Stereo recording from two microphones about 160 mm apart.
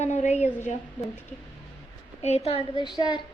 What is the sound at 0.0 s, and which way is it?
Speech, 45° left (ahead or behind).